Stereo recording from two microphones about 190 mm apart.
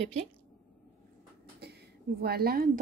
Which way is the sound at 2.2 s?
55° right (ahead or behind).